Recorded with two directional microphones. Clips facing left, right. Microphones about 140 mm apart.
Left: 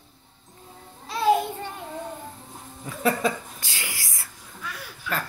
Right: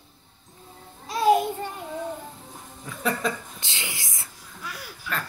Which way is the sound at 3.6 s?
20° right (ahead or behind).